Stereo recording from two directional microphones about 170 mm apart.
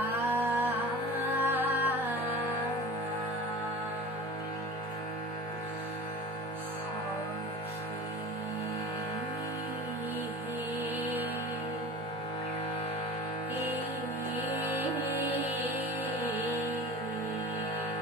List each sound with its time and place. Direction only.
0.0 s music: 10° right (ahead or behind)
11.0 s music: 10° right (ahead or behind)
14.8 s music: 10° right (ahead or behind)